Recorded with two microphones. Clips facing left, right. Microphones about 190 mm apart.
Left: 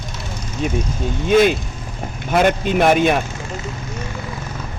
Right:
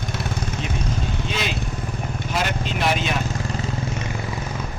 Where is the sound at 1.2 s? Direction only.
50° left (ahead or behind).